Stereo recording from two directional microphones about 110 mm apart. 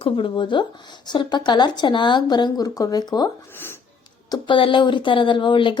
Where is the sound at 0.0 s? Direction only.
50° left (ahead or behind).